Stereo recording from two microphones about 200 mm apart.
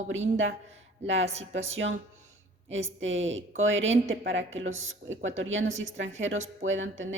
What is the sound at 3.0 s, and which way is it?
A woman's voice, 70° right (ahead or behind).